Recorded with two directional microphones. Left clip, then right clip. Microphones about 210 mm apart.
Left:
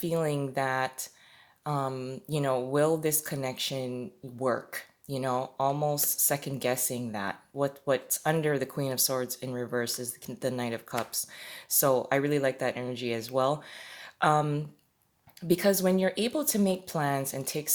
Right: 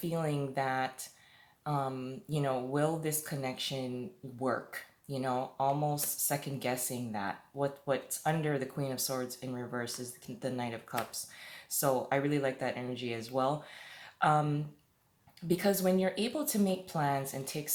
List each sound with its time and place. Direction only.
0.0 s speech: 45° left (ahead or behind)